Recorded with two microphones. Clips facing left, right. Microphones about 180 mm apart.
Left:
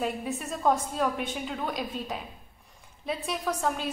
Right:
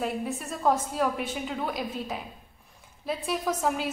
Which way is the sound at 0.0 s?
Centre (ahead or behind).